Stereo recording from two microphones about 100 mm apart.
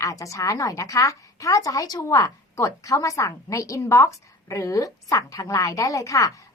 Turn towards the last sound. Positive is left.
turn(degrees=35)  # may be behind; listen again after turning